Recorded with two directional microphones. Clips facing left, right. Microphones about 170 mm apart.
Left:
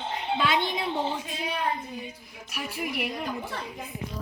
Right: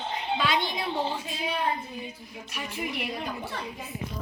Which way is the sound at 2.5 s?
10° left (ahead or behind).